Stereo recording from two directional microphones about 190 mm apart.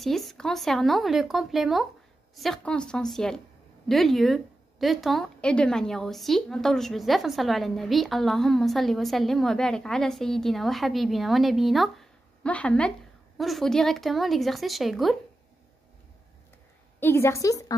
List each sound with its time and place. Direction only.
0.0 s a woman's voice: centre (ahead or behind)
17.0 s a woman's voice: 10° left (ahead or behind)